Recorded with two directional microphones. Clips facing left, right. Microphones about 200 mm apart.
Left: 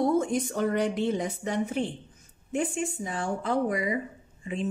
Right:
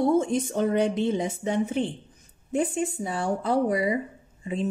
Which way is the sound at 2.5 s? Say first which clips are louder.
Right 3 dB; 35° right (ahead or behind).